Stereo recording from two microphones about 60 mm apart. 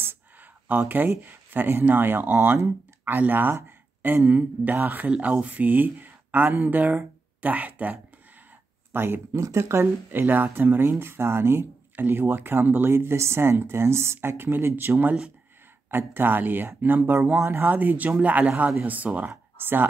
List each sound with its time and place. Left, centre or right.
0.7 s speech: right
8.9 s speech: right
9.3 s speech: right
9.6 s speech: right
10.0 s speech: right